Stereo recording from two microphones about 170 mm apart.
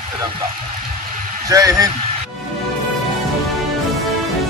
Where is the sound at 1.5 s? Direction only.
20° right (ahead or behind).